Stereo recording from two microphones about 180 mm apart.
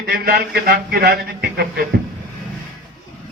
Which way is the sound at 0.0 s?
60° right (ahead or behind).